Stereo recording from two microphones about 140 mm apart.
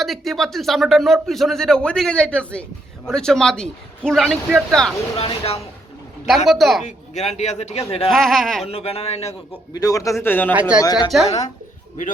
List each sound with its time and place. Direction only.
0.0 s speech: centre (ahead or behind)
5.1 s a man's voice: 45° left (ahead or behind)
6.2 s speech: centre (ahead or behind)
6.8 s a man's voice: 55° left (ahead or behind)
8.1 s speech: centre (ahead or behind)
8.6 s a man's voice: 45° left (ahead or behind)
9.7 s a man's voice: 25° left (ahead or behind)
10.5 s speech: 10° right (ahead or behind)
10.8 s a man's voice: 25° left (ahead or behind)